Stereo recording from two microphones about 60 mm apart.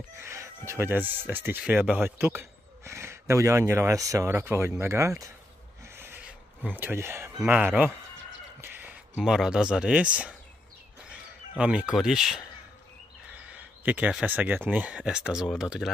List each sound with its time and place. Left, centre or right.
0.2 s chicken: right
0.7 s a man's voice: right
4.3 s speech: right
5.9 s owl: right
6.6 s speech: right
7.0 s speech: right
7.4 s speech: right
9.2 s speech: centre
11.1 s a sound: centre
12.0 s speech: centre
13.5 s a sound: right
14.2 s speech: right; by 15.9 s centre